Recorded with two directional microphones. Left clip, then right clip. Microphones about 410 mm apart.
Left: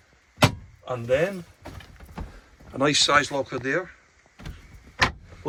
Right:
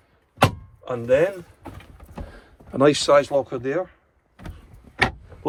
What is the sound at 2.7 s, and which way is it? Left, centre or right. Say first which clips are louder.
Speech: right 4 dB; centre.